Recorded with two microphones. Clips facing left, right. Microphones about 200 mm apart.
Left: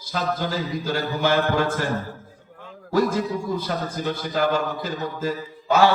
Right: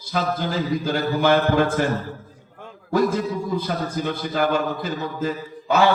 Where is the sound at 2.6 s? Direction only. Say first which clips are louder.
Right 1 dB; 55° right (ahead or behind).